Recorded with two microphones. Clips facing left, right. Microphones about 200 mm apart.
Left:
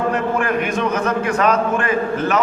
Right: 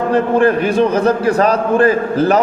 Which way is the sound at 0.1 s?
30° right (ahead or behind).